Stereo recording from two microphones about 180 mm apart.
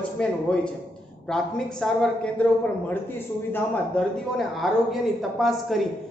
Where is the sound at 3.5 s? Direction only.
10° left (ahead or behind).